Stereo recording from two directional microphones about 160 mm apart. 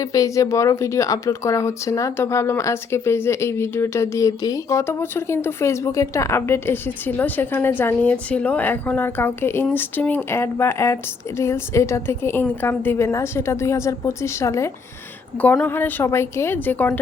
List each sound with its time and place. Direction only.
0.0 s a woman's voice: 20° left (ahead or behind)